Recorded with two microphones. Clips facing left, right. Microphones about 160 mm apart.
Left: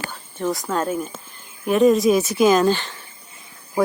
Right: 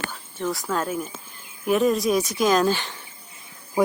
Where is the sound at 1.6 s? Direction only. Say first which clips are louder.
Left 5 dB; centre (ahead or behind).